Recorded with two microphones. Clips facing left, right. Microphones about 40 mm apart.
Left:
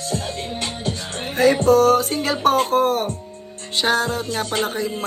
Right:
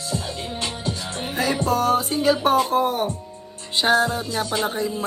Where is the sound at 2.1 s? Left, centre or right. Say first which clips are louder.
Even; left.